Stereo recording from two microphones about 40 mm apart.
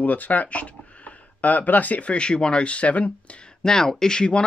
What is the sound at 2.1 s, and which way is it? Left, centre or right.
Speech, left.